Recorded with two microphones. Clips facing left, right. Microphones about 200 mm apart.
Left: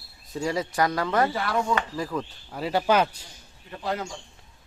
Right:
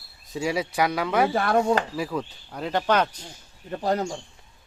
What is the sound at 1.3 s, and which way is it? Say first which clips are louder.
Speech: right 5 dB; 50° right (ahead or behind).